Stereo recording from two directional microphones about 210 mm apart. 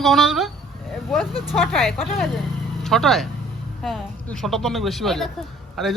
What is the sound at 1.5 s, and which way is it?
Speech, centre (ahead or behind).